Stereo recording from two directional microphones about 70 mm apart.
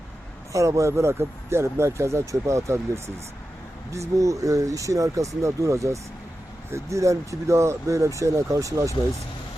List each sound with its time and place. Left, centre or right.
0.5 s speech: right